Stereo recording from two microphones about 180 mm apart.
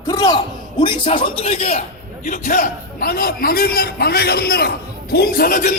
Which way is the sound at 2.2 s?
45° left (ahead or behind).